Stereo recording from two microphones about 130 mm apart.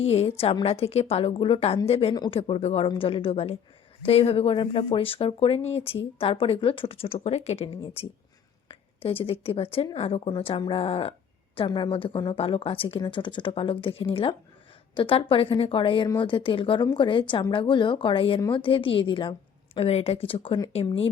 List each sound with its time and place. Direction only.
0.0 s speech: 50° left (ahead or behind)
2.1 s a woman's voice: 35° left (ahead or behind)
2.4 s a woman's voice: 55° left (ahead or behind)